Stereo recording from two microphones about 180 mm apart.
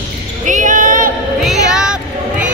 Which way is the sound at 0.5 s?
45° right (ahead or behind).